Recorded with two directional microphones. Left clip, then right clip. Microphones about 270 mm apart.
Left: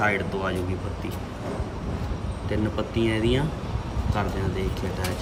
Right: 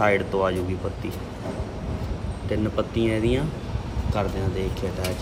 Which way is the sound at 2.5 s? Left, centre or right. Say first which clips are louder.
Right 2 dB; centre.